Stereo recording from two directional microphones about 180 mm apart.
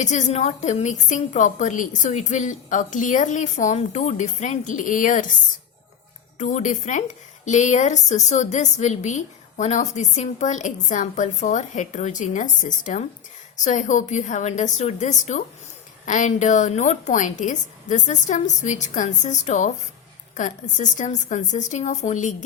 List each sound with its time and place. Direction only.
0.0 s a woman's voice: 40° left (ahead or behind)
6.4 s a woman's voice: 45° left (ahead or behind)